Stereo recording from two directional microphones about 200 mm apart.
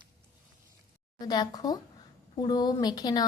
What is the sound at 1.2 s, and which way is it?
Speech, 20° left (ahead or behind).